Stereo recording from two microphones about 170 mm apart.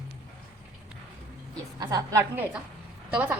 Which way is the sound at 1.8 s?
20° right (ahead or behind).